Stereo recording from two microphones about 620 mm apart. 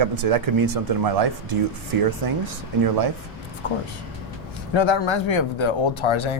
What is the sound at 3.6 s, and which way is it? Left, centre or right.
Speech, left.